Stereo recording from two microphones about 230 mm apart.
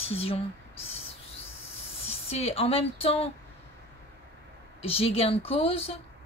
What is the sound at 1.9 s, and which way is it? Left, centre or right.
Speech, left.